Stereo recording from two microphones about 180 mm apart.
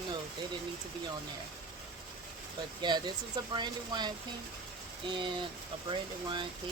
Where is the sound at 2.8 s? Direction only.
25° right (ahead or behind).